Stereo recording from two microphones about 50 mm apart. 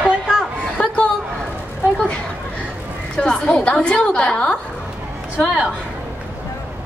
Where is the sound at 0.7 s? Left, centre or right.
Left.